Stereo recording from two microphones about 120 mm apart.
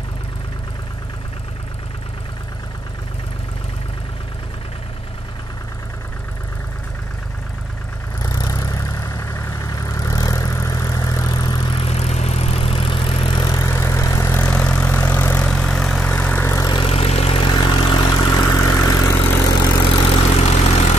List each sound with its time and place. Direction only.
8.2 s vehicle: 30° left (ahead or behind)
16.8 s vehicle: 55° left (ahead or behind)
17.5 s vehicle: 40° left (ahead or behind)
20.2 s vehicle: 55° left (ahead or behind)